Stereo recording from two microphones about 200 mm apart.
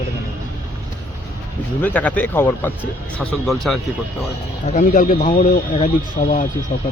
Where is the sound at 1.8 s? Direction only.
10° left (ahead or behind).